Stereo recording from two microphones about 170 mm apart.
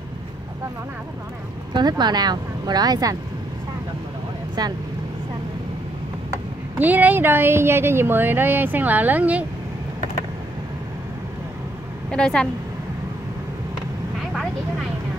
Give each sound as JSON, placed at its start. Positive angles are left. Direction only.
{"t": 1.7, "sound": "speech", "side_deg": -25}
{"t": 4.6, "sound": "speech", "side_deg": -25}
{"t": 6.8, "sound": "speech", "side_deg": -10}
{"t": 12.1, "sound": "speech", "side_deg": 5}